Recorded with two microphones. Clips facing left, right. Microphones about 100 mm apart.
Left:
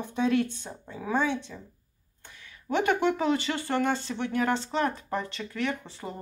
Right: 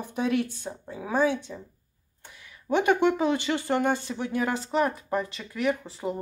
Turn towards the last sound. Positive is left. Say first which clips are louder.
# right 6 dB
turn(degrees=-15)  # may be behind; listen again after turning